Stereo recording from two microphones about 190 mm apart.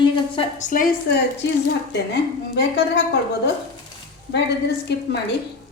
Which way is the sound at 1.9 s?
65° left (ahead or behind).